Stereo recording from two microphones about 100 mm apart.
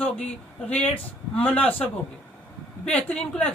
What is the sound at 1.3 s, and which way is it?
A man's voice, 15° left (ahead or behind).